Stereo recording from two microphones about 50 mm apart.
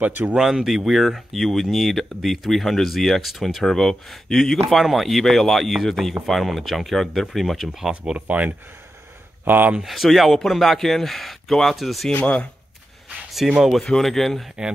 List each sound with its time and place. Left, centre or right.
0.0 s speech: right
0.3 s speech: centre
3.6 s speech: centre
7.9 s speech: right
9.8 s speech: centre
12.1 s speech: left
13.3 s speech: centre
13.7 s speech: centre